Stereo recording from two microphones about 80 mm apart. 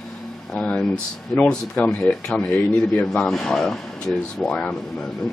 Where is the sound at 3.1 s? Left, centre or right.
Centre.